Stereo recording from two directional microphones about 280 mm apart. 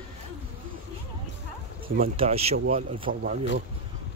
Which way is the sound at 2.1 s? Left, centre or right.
Right.